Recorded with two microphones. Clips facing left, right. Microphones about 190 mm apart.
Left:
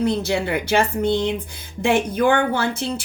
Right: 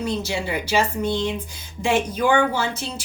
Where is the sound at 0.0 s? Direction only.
60° left (ahead or behind).